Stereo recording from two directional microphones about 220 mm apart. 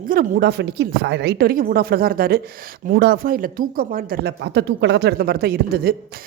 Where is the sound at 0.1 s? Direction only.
45° right (ahead or behind).